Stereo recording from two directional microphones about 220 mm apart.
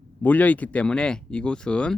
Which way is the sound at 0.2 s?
5° left (ahead or behind).